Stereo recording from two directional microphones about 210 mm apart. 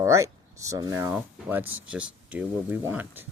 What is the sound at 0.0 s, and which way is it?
Speech, 15° right (ahead or behind).